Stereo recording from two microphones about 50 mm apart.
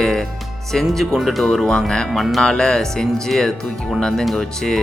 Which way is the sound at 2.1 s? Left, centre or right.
Centre.